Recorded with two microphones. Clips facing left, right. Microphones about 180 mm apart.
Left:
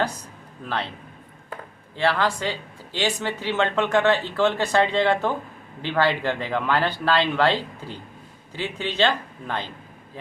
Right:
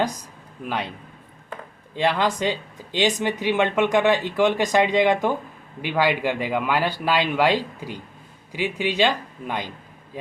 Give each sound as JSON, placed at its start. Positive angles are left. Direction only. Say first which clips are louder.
{"t": 0.6, "sound": "speech", "louder": "right 1 dB", "side_deg": -15}
{"t": 2.0, "sound": "speech", "louder": "right 1 dB", "side_deg": -15}